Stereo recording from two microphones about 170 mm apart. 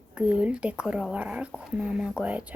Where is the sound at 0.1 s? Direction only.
5° right (ahead or behind).